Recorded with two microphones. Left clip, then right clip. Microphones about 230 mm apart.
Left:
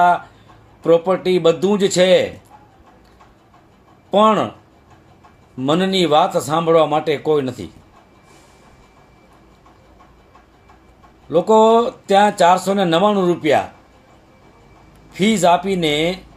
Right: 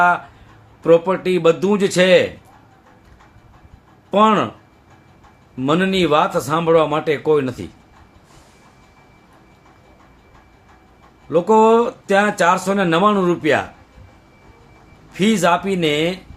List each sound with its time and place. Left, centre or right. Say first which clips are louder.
0.8 s a man's voice: right 1 dB; centre
4.1 s a man's voice: left 1 dB; centre
5.6 s a man's voice: even; centre
11.3 s a man's voice: left 1 dB; centre
15.2 s a man's voice: left 2 dB; centre